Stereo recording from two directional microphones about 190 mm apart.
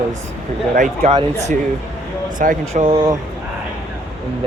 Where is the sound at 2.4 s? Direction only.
45° right (ahead or behind).